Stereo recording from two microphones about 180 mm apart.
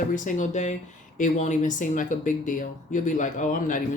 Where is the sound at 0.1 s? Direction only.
45° left (ahead or behind).